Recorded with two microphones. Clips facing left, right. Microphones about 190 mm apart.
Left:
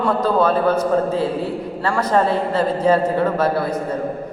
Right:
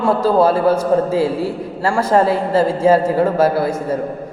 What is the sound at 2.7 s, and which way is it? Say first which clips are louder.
Speech: right 2 dB; 10° right (ahead or behind).